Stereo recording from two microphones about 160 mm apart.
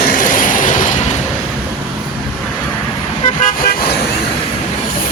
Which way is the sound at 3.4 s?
55° left (ahead or behind).